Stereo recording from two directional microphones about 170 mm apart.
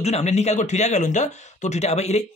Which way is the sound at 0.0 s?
40° left (ahead or behind).